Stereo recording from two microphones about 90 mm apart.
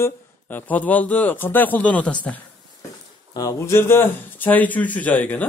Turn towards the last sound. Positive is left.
turn(degrees=20)  # may be behind; listen again after turning